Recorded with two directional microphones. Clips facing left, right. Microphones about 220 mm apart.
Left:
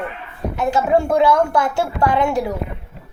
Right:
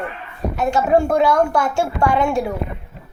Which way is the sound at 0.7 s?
20° left (ahead or behind).